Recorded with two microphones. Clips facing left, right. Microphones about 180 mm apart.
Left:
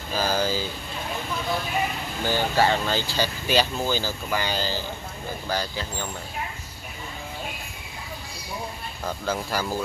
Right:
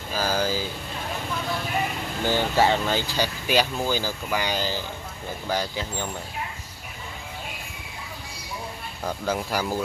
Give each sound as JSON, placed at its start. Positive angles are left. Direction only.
{"t": 0.1, "sound": "speech", "side_deg": -10}
{"t": 2.2, "sound": "speech", "side_deg": -20}
{"t": 9.2, "sound": "speech", "side_deg": -15}